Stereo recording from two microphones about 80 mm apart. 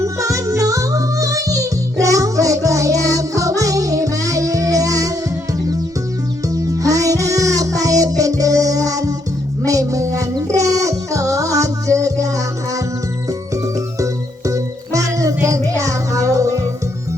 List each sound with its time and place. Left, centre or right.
0.0 s music: right
6.5 s music: right
13.5 s music: right